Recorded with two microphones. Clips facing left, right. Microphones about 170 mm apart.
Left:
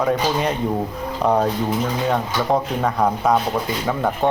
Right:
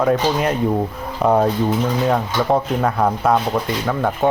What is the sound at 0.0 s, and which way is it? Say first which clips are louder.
Speech: right 2 dB; centre (ahead or behind).